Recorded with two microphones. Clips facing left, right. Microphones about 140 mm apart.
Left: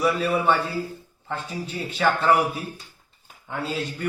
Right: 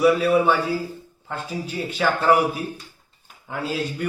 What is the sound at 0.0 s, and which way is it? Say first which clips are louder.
A man's voice: right 5 dB; 5° right (ahead or behind).